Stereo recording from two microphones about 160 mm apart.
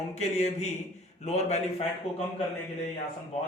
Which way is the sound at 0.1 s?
45° left (ahead or behind).